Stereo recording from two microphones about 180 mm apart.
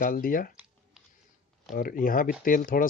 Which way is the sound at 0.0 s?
50° left (ahead or behind).